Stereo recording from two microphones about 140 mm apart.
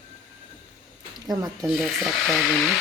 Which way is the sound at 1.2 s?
25° right (ahead or behind).